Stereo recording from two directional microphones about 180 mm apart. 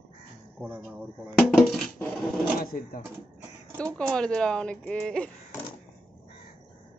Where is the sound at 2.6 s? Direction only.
55° left (ahead or behind).